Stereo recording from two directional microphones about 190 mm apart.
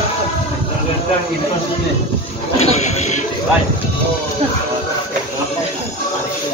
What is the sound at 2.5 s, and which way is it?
Speech, 35° left (ahead or behind).